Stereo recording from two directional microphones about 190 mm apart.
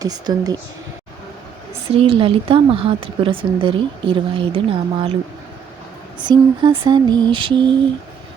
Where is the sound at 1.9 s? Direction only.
30° right (ahead or behind).